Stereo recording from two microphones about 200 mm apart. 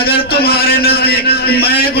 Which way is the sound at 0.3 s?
50° left (ahead or behind).